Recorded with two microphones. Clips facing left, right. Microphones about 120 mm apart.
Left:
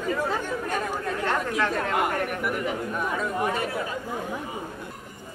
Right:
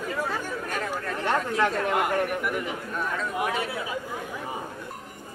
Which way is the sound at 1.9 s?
Centre (ahead or behind).